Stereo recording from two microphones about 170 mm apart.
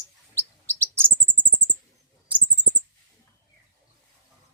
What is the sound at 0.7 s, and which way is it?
Chirp, 15° right (ahead or behind).